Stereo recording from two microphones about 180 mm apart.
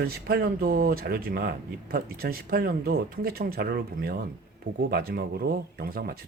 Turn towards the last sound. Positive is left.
turn(degrees=-55)  # may be behind; listen again after turning